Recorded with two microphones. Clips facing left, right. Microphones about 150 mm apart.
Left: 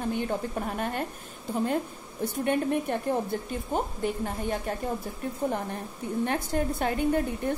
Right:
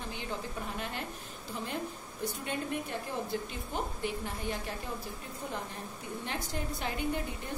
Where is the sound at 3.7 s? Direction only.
45° left (ahead or behind).